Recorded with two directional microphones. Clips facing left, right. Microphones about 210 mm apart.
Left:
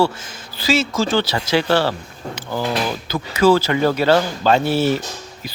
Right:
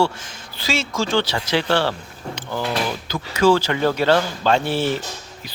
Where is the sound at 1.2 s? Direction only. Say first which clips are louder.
Left 3 dB; 10° left (ahead or behind).